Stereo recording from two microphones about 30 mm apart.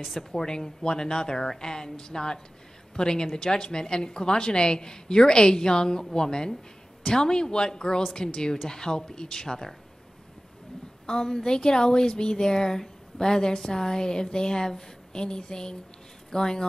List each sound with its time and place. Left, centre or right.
0.3 s a woman's voice: left
7.1 s a woman's voice: left
11.1 s a woman's voice: left